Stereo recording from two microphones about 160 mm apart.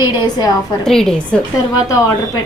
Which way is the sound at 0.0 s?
25° left (ahead or behind).